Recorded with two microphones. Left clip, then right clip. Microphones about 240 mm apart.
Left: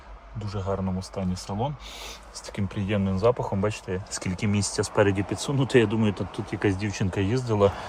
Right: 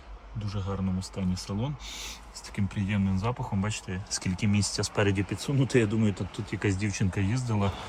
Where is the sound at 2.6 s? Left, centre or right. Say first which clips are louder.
Left 5 dB; centre.